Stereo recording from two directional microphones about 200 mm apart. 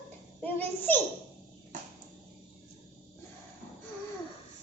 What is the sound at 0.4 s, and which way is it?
Speech, 10° left (ahead or behind).